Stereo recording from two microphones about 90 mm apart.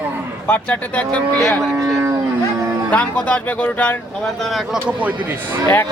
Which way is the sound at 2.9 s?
15° left (ahead or behind).